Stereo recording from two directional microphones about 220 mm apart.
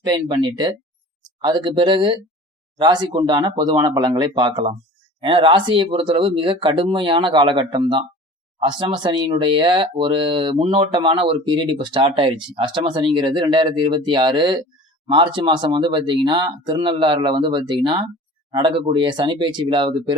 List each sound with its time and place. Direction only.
0.0 s speech: 20° right (ahead or behind)